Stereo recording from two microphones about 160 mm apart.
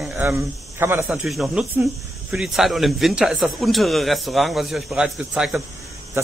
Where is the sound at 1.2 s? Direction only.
Centre (ahead or behind).